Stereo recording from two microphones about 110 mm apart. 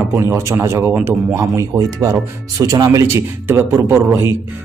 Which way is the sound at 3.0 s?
20° right (ahead or behind).